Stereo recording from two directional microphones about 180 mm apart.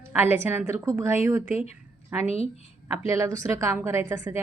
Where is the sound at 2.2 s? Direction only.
35° left (ahead or behind).